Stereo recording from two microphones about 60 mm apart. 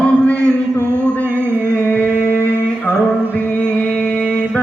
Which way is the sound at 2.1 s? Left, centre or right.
Right.